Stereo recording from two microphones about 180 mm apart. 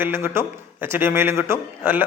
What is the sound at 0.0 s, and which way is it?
A man's voice, 10° right (ahead or behind).